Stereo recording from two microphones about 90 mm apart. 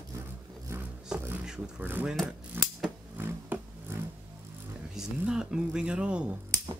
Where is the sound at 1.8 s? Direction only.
20° right (ahead or behind).